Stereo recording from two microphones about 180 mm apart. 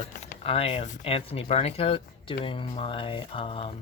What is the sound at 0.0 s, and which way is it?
Speech, 35° left (ahead or behind).